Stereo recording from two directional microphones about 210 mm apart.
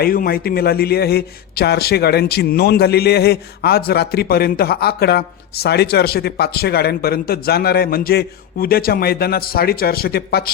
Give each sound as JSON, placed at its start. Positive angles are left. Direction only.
{"t": 0.0, "sound": "a man's voice", "side_deg": 45}